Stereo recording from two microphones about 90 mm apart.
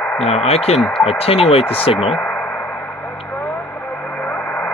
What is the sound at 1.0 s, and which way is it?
Speech, 90° left.